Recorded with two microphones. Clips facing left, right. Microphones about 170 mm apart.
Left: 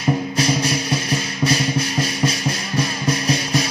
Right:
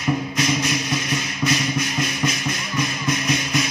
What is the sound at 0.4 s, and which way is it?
Music, 35° left (ahead or behind).